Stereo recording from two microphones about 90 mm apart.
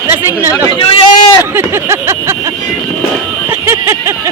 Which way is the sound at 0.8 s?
80° left.